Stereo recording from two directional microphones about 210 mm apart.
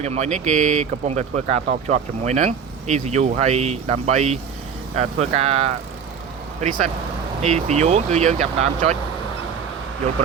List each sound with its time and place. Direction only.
0.0 s speech: 35° right (ahead or behind)
5.4 s speech: 30° right (ahead or behind)